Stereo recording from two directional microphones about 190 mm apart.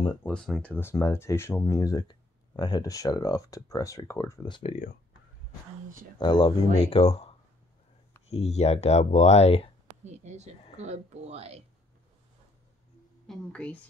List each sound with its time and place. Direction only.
0.2 s speech: 5° left (ahead or behind); by 4.7 s 25° left (ahead or behind)
6.1 s speech: 25° left (ahead or behind)
9.8 s speech: 35° right (ahead or behind)
13.3 s a woman's voice: 5° left (ahead or behind)